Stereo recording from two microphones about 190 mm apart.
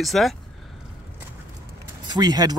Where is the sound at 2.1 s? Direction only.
20° right (ahead or behind).